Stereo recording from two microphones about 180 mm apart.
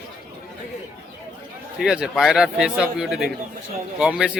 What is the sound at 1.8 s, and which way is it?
A man's voice, 5° right (ahead or behind).